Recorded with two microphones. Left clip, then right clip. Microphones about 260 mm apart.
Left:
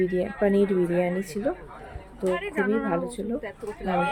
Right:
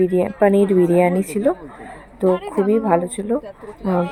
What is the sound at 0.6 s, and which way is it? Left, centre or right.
Speech, right.